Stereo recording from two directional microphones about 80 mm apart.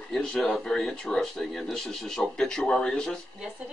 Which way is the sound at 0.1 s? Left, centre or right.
Centre.